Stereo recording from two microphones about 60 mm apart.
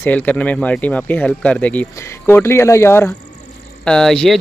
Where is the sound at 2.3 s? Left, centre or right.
Left.